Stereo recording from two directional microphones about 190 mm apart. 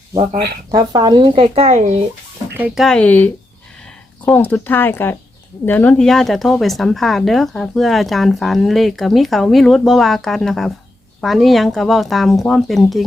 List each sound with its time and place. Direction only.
0.7 s speech: 20° right (ahead or behind); by 2.0 s 35° right (ahead or behind)
2.6 s speech: 5° right (ahead or behind)